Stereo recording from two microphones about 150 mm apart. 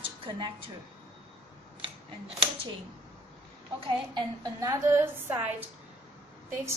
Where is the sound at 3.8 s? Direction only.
30° right (ahead or behind).